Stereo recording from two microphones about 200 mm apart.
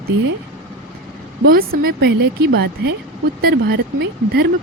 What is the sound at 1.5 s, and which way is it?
Speech, 50° right (ahead or behind).